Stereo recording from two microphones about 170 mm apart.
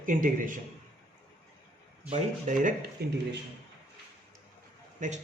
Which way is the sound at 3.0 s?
70° right (ahead or behind).